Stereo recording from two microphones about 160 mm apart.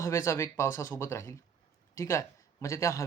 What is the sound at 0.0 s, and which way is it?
Speech, 20° left (ahead or behind).